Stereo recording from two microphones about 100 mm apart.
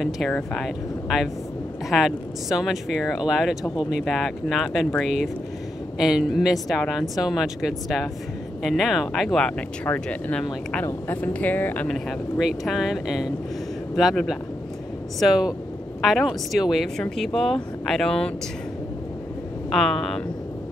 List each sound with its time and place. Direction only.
0.3 s speech: 5° left (ahead or behind)
11.9 s speech: centre (ahead or behind)
19.7 s speech: 5° left (ahead or behind)